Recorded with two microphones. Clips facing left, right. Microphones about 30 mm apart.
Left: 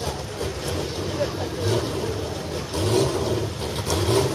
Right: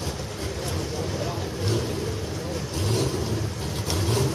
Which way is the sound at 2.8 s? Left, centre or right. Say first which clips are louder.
Left 6 dB; left.